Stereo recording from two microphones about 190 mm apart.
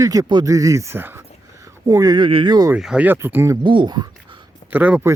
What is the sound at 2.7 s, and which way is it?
Speech, 5° right (ahead or behind).